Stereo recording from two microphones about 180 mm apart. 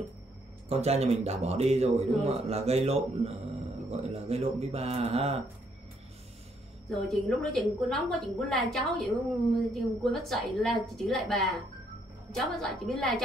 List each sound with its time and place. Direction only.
0.7 s a man's voice: 35° right (ahead or behind)
6.9 s a woman's voice: centre (ahead or behind)